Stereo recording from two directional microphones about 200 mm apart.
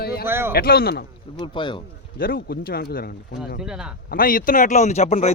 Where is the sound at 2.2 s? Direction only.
45° left (ahead or behind).